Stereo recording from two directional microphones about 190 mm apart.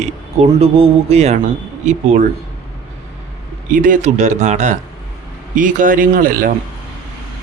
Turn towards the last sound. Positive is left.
turn(degrees=-45)  # may be behind; listen again after turning